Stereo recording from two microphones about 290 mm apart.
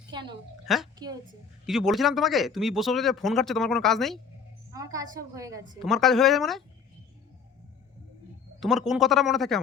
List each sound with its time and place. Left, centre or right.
0.1 s a sound: centre
0.6 s a woman's voice: centre
0.9 s a woman's voice: centre
1.6 s speech: centre
4.7 s a woman's voice: centre
5.8 s speech: centre
8.6 s speech: centre